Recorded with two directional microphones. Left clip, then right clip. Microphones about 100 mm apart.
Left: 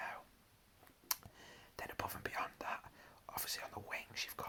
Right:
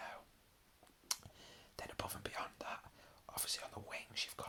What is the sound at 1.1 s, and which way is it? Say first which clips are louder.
Whispering: even; 15° right (ahead or behind).